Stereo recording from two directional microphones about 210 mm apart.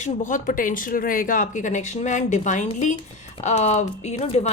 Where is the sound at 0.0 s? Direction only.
35° left (ahead or behind).